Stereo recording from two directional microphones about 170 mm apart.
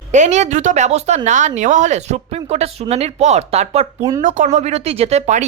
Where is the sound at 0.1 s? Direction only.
45° right (ahead or behind).